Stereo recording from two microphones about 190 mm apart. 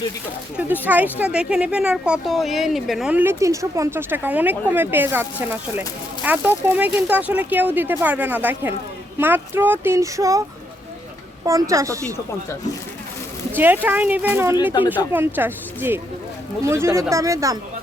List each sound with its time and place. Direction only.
0.5 s speech: 10° right (ahead or behind)
11.4 s speech: 15° right (ahead or behind)
13.8 s speech: 10° right (ahead or behind)